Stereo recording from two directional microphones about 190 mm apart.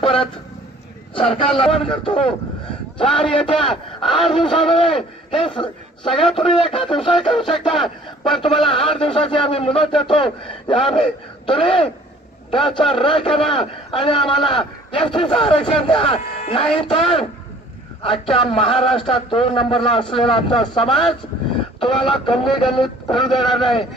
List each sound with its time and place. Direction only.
0.0 s a man's voice: 30° left (ahead or behind)
7.7 s speech: centre (ahead or behind)
8.3 s a man's voice: 25° left (ahead or behind)